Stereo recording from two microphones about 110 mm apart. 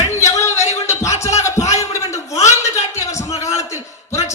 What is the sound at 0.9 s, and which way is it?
Music, 25° left (ahead or behind).